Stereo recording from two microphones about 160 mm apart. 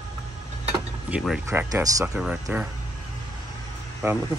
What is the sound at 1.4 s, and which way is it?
Speech, 20° right (ahead or behind).